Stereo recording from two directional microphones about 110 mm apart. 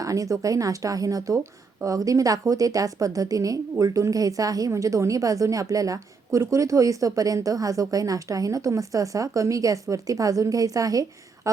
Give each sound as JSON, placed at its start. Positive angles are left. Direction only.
{"t": 0.0, "sound": "a woman's voice", "side_deg": -30}